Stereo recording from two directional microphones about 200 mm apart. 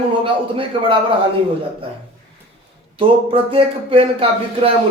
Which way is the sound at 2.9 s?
25° right (ahead or behind).